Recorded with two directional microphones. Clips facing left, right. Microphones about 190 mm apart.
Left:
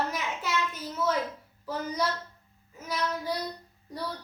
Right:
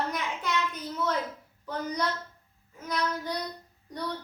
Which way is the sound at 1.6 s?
5° left (ahead or behind).